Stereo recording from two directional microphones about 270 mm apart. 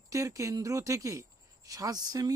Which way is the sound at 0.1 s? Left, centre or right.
Centre.